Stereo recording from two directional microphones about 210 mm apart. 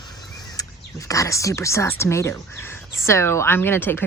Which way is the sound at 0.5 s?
15° left (ahead or behind).